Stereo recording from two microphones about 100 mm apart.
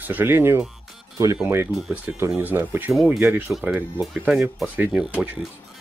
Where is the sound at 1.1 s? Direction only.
35° right (ahead or behind).